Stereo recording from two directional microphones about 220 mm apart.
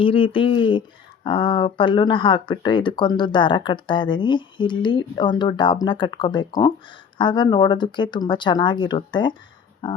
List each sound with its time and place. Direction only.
0.0 s speech: 25° left (ahead or behind)